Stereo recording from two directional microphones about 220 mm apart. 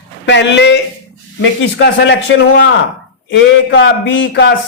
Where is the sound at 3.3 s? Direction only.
55° left (ahead or behind).